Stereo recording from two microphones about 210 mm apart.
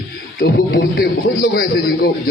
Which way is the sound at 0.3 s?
50° left (ahead or behind).